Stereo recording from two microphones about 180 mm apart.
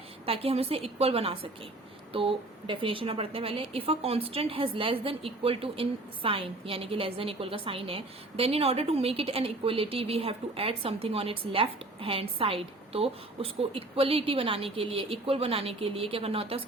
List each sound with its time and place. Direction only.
0.3 s a woman's voice: 35° right (ahead or behind)